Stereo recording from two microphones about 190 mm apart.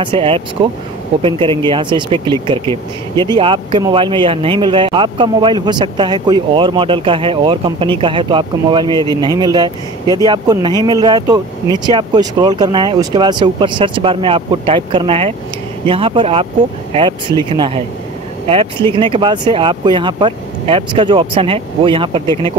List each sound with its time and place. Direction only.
0.0 s speech: 30° right (ahead or behind)
1.7 s speech: 25° right (ahead or behind)